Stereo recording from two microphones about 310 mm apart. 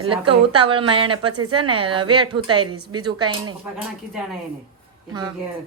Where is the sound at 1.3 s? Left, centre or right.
Right.